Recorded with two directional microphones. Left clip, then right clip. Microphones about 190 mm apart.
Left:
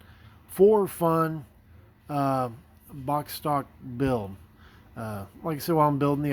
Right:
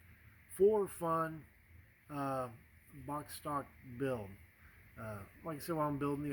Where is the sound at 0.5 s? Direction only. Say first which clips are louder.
Left 11 dB; 45° left (ahead or behind).